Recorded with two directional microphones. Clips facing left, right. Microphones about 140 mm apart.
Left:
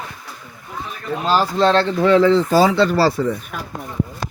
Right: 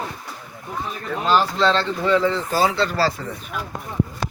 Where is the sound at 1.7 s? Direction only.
65° left (ahead or behind); by 2.4 s 90° left.